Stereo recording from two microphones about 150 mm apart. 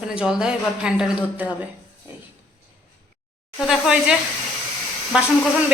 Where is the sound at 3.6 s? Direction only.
5° right (ahead or behind).